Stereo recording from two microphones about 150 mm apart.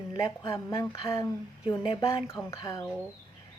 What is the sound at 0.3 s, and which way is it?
A woman's voice, 20° left (ahead or behind).